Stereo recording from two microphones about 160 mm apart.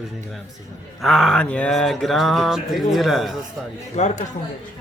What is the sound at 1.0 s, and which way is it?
A man's voice, centre (ahead or behind).